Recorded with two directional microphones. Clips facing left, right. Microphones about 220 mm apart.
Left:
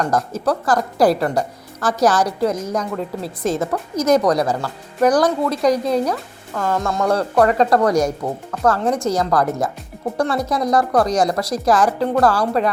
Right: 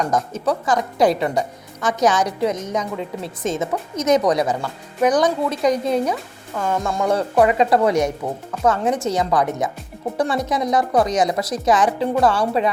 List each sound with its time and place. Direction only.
0.0 s a woman's voice: centre (ahead or behind)
6.6 s a woman's voice: 15° right (ahead or behind)